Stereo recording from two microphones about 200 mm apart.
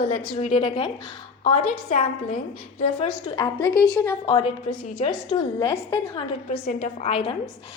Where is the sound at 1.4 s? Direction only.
40° left (ahead or behind).